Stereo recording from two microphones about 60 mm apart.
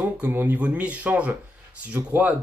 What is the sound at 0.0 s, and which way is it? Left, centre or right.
Speech, right.